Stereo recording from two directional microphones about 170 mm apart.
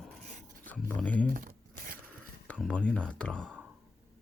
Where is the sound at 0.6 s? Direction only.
10° left (ahead or behind).